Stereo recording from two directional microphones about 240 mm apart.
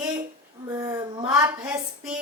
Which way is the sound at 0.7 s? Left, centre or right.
Centre.